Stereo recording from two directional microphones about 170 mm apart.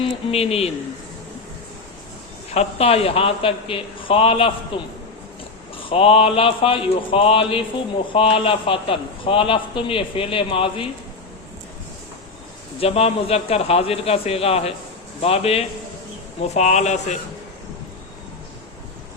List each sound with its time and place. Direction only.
0.0 s a man's voice: 35° left (ahead or behind)
2.5 s a man's voice: 35° left (ahead or behind)
12.8 s a man's voice: 35° left (ahead or behind)